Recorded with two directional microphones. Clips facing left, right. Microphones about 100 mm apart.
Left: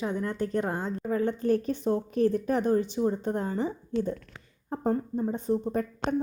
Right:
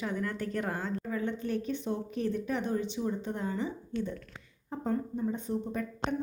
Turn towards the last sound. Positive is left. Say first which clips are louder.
# left 5 dB
turn(degrees=35)  # may be behind; listen again after turning